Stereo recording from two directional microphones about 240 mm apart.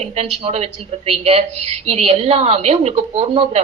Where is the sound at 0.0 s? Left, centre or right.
Right.